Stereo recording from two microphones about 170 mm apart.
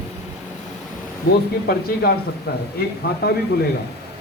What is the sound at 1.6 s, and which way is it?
Speech, 65° left (ahead or behind).